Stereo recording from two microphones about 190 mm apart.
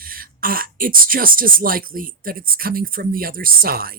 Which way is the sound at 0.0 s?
50° right (ahead or behind).